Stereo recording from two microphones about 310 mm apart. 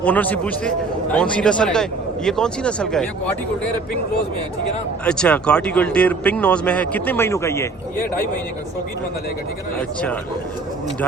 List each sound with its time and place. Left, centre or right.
0.0 s speech: centre
5.0 s speech: centre